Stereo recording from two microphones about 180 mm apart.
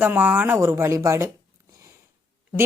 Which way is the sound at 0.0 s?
10° right (ahead or behind).